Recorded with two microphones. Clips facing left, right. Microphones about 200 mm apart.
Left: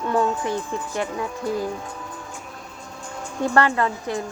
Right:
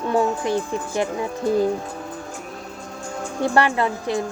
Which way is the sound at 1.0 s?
25° right (ahead or behind).